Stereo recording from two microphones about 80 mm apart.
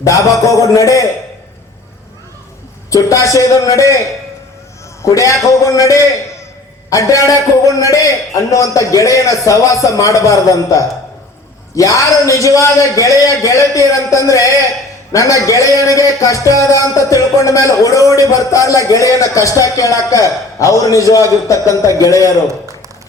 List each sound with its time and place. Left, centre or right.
0.0 s a man's voice: left
2.9 s a man's voice: left
5.0 s a man's voice: left